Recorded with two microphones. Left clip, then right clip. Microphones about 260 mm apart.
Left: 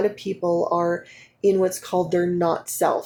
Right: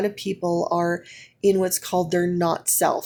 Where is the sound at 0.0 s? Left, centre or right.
Right.